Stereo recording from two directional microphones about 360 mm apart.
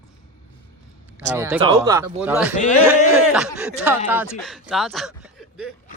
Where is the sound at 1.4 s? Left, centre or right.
Centre.